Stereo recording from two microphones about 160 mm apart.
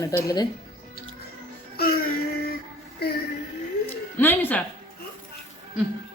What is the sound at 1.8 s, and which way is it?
Music, 80° left.